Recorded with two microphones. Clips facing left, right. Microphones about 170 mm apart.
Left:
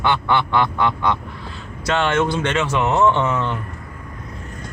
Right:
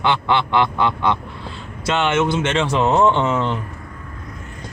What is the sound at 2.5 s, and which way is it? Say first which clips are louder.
Speech: right 3 dB; 30° right (ahead or behind).